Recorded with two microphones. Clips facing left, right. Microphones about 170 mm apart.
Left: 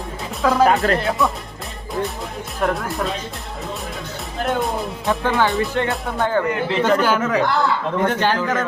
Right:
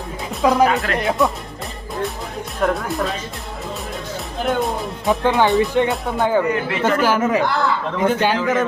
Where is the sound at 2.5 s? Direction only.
Centre (ahead or behind).